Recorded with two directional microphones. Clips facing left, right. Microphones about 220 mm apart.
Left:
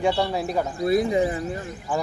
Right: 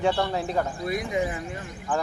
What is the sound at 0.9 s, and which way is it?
Speech, 35° left (ahead or behind).